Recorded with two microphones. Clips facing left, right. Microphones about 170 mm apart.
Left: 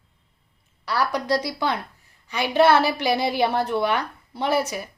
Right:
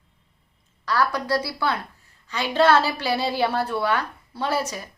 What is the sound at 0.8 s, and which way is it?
A woman's voice, 15° left (ahead or behind).